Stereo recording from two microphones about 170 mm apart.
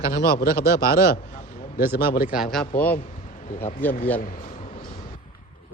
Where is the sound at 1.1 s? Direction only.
60° left (ahead or behind).